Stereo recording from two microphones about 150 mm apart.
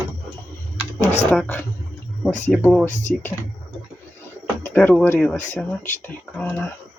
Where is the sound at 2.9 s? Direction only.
55° left (ahead or behind).